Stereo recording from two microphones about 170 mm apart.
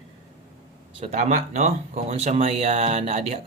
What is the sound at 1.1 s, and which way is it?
Speech, 45° right (ahead or behind).